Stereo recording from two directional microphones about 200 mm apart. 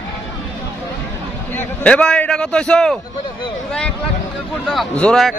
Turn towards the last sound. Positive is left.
turn(degrees=5)  # may be behind; listen again after turning